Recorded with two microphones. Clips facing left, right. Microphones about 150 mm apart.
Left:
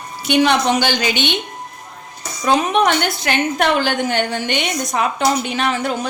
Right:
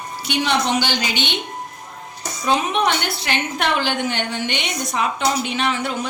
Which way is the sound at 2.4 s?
45° left (ahead or behind).